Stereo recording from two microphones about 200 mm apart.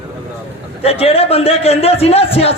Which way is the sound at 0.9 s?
30° left (ahead or behind).